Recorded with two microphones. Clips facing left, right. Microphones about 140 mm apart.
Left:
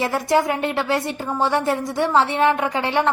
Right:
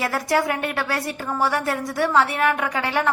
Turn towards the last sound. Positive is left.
turn(degrees=25)  # may be behind; listen again after turning